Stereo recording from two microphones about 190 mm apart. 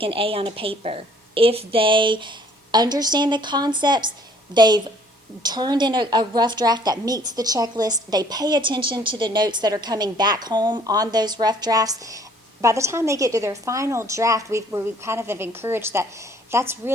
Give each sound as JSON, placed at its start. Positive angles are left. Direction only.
{"t": 0.0, "sound": "a woman's voice", "side_deg": -30}